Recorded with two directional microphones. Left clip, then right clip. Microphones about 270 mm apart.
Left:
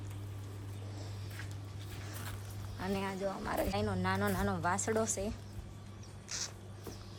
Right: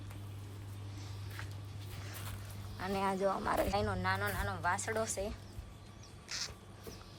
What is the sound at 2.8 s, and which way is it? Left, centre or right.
Speech, centre.